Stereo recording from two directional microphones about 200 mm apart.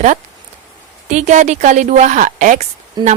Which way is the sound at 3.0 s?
20° right (ahead or behind).